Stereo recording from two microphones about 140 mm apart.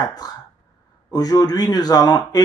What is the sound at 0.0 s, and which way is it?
Speech, 25° left (ahead or behind).